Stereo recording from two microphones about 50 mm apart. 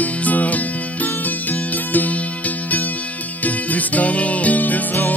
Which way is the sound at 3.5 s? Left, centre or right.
Left.